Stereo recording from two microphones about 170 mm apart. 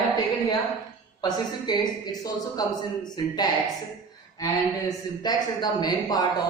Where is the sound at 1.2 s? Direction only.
25° left (ahead or behind).